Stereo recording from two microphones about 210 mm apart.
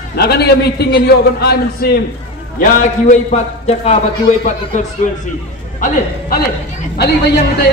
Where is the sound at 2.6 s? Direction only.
40° left (ahead or behind).